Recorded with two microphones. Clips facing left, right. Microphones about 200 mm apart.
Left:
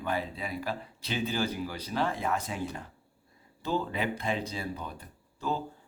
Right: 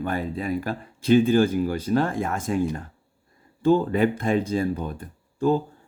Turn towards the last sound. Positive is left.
turn(degrees=-50)  # may be behind; listen again after turning